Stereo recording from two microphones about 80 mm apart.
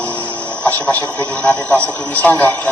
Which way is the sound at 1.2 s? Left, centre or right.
Right.